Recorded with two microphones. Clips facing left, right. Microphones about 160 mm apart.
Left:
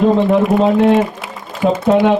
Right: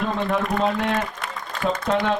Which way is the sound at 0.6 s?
20° left (ahead or behind).